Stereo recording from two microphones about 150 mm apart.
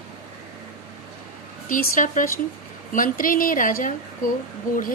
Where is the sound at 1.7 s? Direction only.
65° left (ahead or behind).